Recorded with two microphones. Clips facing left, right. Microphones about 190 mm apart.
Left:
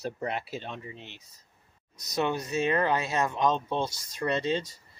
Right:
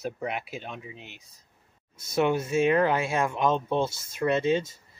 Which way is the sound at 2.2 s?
10° right (ahead or behind).